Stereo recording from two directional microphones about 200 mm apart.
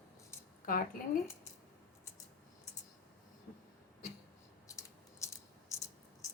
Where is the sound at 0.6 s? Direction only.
45° left (ahead or behind).